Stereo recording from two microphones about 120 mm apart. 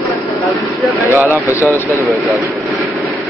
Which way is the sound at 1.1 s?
20° right (ahead or behind).